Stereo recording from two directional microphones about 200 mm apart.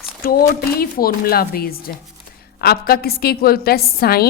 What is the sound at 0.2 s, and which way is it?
A woman's voice, 50° left (ahead or behind).